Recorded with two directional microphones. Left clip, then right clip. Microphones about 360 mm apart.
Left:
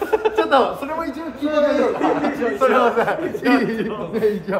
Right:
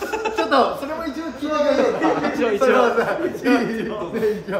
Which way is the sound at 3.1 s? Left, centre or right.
Centre.